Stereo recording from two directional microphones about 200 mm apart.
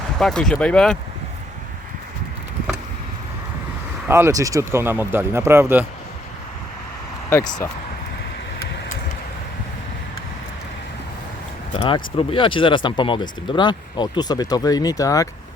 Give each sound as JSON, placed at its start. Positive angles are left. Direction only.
{"t": 0.2, "sound": "speech", "side_deg": 0}
{"t": 4.1, "sound": "speech", "side_deg": -15}
{"t": 7.3, "sound": "speech", "side_deg": 10}
{"t": 11.7, "sound": "speech", "side_deg": 25}